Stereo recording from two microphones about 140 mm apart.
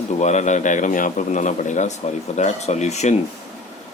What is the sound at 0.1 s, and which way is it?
Speech, 55° left (ahead or behind).